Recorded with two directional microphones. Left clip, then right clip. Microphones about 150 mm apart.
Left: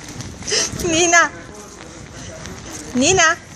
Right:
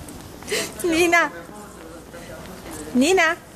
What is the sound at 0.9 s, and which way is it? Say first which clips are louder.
Speech: left 4 dB; 20° right (ahead or behind).